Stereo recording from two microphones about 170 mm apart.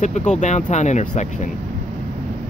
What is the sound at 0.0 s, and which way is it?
Speech, 45° left (ahead or behind).